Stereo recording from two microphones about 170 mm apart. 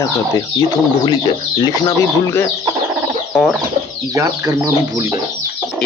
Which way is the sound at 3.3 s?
Centre (ahead or behind).